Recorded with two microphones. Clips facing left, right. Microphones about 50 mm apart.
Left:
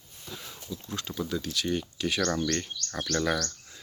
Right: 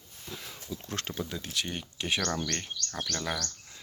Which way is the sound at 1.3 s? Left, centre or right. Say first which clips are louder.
Left 5 dB; right.